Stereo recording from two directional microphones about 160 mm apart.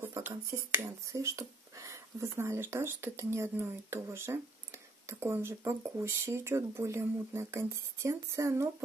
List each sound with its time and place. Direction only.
0.0 s speech: 15° right (ahead or behind)